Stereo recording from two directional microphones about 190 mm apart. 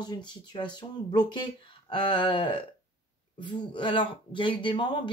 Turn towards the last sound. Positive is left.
turn(degrees=25)  # may be behind; listen again after turning